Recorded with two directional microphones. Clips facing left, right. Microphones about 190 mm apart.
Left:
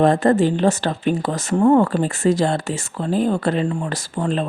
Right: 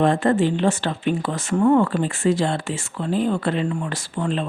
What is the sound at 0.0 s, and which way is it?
Speech, 40° left (ahead or behind).